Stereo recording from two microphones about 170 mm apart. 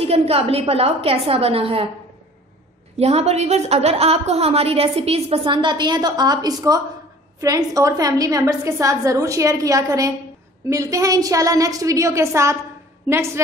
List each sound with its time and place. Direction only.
0.0 s a woman's voice: 35° right (ahead or behind)
3.0 s a woman's voice: 35° right (ahead or behind); by 13.4 s 15° right (ahead or behind)